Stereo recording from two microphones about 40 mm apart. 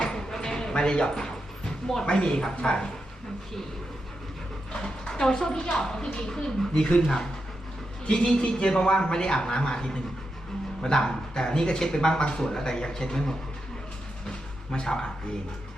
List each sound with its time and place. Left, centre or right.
0.0 s a sound: centre
2.0 s a man's voice: left
4.7 s a man's voice: centre
8.0 s a man's voice: left
14.7 s speech: centre